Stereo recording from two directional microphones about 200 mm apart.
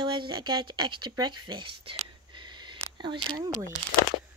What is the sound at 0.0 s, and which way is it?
A woman's voice, 25° right (ahead or behind).